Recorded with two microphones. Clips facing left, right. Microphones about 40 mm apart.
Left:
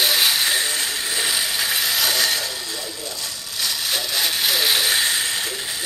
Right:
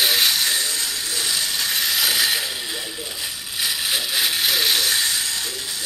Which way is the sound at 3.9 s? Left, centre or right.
Centre.